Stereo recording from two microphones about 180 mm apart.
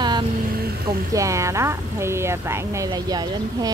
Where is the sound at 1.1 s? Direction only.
15° right (ahead or behind).